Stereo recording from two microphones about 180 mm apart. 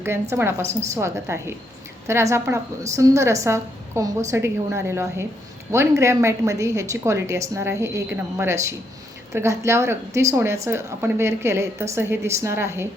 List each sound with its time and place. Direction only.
0.0 s a woman's voice: 15° right (ahead or behind)